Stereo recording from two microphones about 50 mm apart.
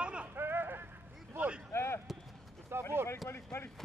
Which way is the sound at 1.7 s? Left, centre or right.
Left.